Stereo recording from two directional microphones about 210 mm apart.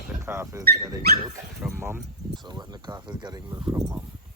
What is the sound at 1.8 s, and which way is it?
Speech, 10° right (ahead or behind).